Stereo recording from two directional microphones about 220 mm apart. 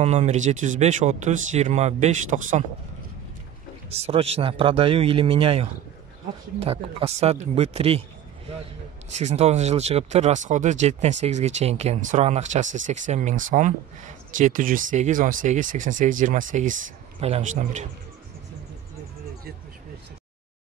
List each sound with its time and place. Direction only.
0.0 s speech: 30° right (ahead or behind)
3.9 s speech: 25° right (ahead or behind)
9.1 s speech: 30° right (ahead or behind)